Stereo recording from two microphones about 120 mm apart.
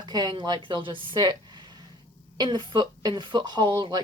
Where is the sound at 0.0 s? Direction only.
35° right (ahead or behind).